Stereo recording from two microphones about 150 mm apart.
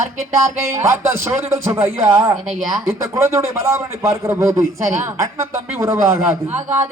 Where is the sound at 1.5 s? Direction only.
20° right (ahead or behind).